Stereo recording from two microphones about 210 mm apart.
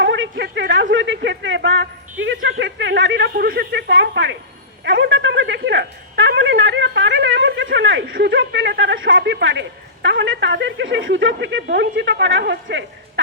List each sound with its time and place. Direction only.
0.0 s speech: 60° right (ahead or behind)
4.9 s a sound: 60° right (ahead or behind)
8.1 s speech: 55° right (ahead or behind)